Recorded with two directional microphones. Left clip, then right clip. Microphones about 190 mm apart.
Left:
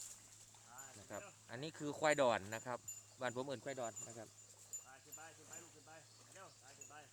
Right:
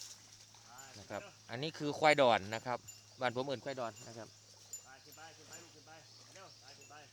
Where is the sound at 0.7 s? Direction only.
5° right (ahead or behind).